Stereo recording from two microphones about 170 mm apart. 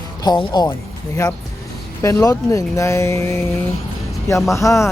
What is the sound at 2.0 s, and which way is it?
Speech, 20° left (ahead or behind).